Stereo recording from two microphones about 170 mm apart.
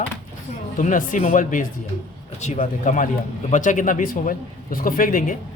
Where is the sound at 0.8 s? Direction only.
50° left (ahead or behind).